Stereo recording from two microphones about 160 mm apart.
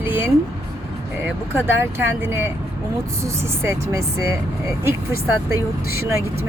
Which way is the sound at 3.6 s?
15° right (ahead or behind).